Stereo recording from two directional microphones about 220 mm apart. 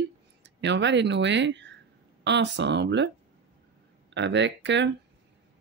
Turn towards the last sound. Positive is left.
turn(degrees=-55)  # may be behind; listen again after turning